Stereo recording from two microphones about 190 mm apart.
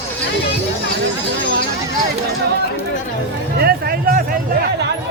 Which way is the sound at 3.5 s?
55° right (ahead or behind).